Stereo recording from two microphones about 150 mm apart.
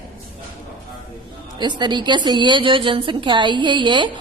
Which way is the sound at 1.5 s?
30° right (ahead or behind).